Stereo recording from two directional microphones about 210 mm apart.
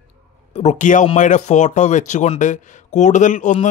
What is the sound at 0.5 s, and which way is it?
Speech, 30° left (ahead or behind).